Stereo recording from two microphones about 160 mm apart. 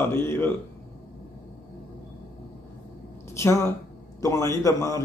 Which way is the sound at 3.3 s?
15° left (ahead or behind).